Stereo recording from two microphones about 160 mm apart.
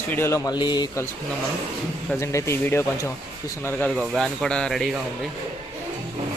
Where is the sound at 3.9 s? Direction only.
Centre (ahead or behind).